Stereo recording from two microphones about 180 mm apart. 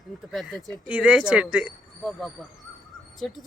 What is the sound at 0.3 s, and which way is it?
Speech, centre (ahead or behind).